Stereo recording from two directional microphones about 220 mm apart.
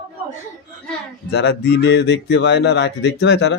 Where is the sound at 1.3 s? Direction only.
50° left (ahead or behind).